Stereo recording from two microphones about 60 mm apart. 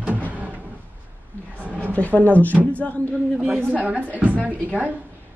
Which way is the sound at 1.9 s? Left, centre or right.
Left.